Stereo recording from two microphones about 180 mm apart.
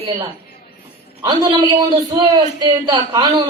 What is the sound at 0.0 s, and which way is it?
A man's voice, 25° right (ahead or behind).